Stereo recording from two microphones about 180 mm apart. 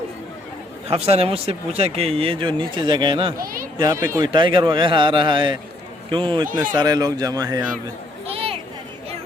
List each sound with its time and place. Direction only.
0.9 s speech: 35° right (ahead or behind)
3.3 s speech: 55° right (ahead or behind)
4.2 s a man's voice: 25° right (ahead or behind)
8.3 s a sound: 30° right (ahead or behind)